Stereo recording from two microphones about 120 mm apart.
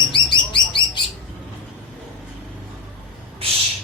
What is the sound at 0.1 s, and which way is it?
Bird, 45° left (ahead or behind).